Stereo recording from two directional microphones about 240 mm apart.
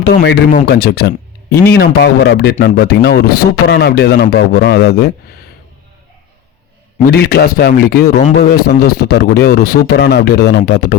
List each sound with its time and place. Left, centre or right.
0.0 s speech: left
7.0 s speech: left
8.2 s a man's voice: left
9.0 s speech: left